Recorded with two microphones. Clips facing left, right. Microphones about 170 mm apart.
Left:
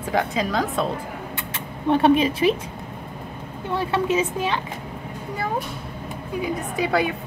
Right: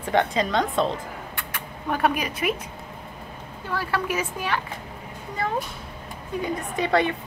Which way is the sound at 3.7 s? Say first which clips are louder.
Left 5 dB; 25° left (ahead or behind).